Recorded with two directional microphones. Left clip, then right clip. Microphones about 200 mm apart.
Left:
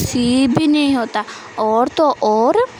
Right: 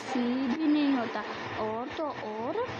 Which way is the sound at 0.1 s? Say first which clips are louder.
Left 14 dB; 65° left (ahead or behind).